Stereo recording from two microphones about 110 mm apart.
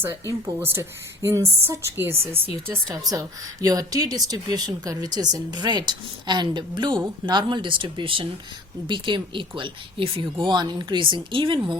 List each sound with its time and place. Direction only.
0.6 s speech: 20° right (ahead or behind)
2.9 s speech: 35° right (ahead or behind)